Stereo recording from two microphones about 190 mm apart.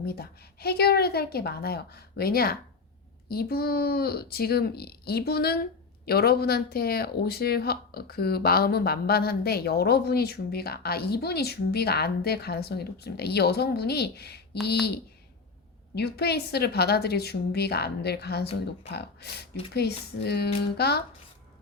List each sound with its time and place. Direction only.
0.0 s speech: 55° left (ahead or behind)
16.0 s speech: 55° left (ahead or behind)